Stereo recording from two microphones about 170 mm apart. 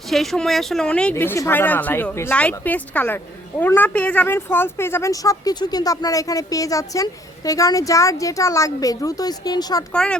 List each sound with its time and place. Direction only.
0.1 s speech: centre (ahead or behind); by 9.8 s 25° left (ahead or behind)
9.9 s speech: 5° left (ahead or behind)